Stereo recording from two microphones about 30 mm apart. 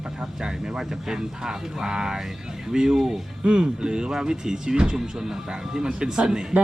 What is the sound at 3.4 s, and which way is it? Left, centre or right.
Speech, right.